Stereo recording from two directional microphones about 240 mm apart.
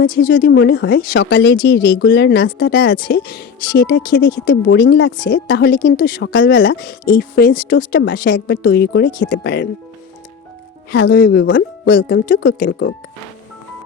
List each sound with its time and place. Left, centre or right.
0.1 s speech: left
0.3 s a woman's voice: left
6.2 s a woman's voice: left
7.0 s a woman's voice: left
10.9 s a woman's voice: left